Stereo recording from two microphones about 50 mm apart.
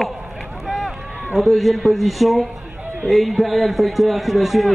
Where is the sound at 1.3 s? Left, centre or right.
Centre.